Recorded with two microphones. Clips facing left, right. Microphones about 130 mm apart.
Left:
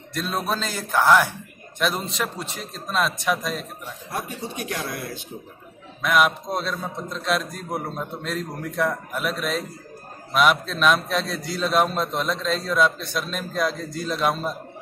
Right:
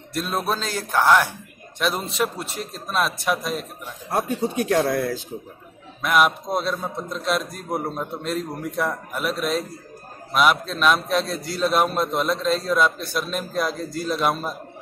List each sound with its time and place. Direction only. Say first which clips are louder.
0.1 s a man's voice: right 1 dB; 5° right (ahead or behind)
4.1 s speech: right 8 dB; 55° right (ahead or behind)
6.0 s a man's voice: right 1 dB; 5° right (ahead or behind)